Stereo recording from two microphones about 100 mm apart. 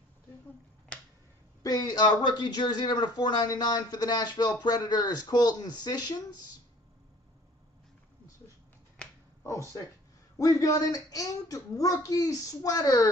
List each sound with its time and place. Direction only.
1.6 s speech: 40° left (ahead or behind)
9.4 s speech: 30° left (ahead or behind)